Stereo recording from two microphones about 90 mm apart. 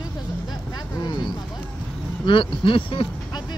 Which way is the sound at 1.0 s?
60° left (ahead or behind).